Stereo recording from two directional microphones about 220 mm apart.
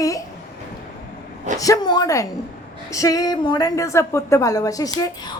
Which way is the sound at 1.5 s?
15° left (ahead or behind).